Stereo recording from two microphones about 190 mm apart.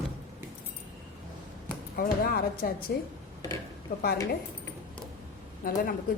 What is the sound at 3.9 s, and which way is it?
Speech, 45° left (ahead or behind).